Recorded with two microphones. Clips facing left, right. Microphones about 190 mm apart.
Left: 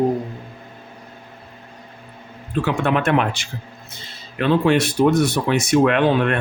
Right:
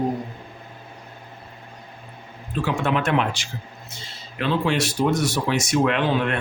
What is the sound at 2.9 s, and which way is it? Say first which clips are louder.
Speech: left 3 dB; 55° left (ahead or behind).